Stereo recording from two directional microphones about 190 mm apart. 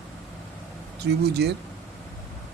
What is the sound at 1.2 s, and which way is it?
Speech, 60° right (ahead or behind).